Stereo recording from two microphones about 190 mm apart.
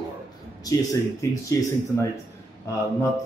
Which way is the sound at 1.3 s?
15° left (ahead or behind).